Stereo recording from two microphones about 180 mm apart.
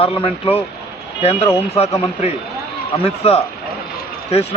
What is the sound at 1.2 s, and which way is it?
Speech, 35° left (ahead or behind).